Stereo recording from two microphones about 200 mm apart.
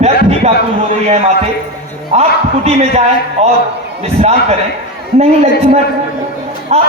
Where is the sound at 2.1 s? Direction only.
35° right (ahead or behind).